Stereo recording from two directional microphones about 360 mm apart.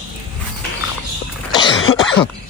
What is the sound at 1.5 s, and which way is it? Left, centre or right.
Throat clearing, centre.